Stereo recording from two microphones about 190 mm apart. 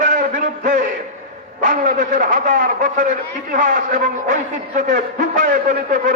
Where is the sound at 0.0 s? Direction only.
45° right (ahead or behind).